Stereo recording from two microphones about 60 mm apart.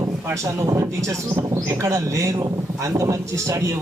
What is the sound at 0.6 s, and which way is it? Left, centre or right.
A man's voice, right.